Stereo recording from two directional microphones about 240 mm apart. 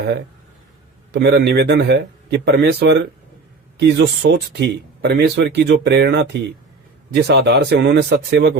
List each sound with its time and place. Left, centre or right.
1.1 s speech: right